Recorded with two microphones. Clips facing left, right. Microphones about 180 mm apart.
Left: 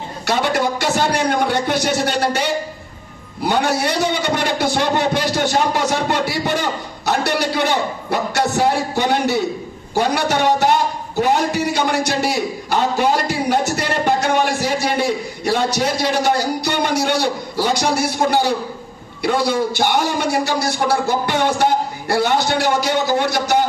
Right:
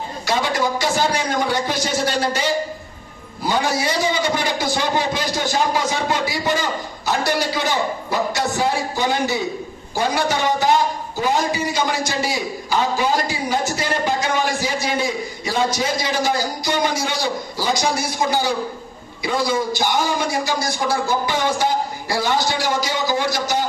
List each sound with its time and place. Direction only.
0.3 s a man's voice: 65° left (ahead or behind)